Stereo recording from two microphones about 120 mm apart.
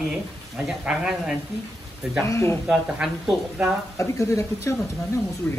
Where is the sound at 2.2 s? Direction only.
25° left (ahead or behind).